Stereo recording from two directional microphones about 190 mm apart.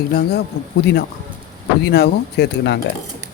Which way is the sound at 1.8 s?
55° left (ahead or behind).